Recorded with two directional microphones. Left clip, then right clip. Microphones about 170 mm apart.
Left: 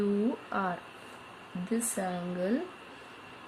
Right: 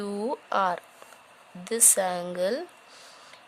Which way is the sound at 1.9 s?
90° right.